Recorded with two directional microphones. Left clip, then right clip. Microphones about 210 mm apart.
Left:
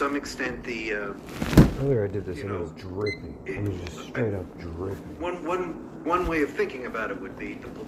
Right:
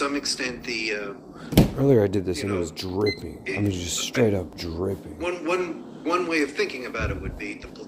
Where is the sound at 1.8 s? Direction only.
65° right (ahead or behind).